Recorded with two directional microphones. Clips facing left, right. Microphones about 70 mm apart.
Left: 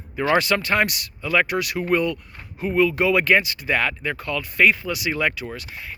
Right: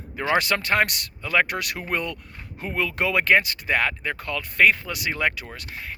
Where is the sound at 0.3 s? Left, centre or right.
Right.